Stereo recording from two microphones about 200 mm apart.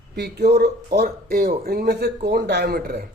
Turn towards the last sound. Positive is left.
turn(degrees=-50)  # may be behind; listen again after turning